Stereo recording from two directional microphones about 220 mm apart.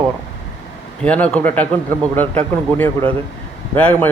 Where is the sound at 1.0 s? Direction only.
5° left (ahead or behind).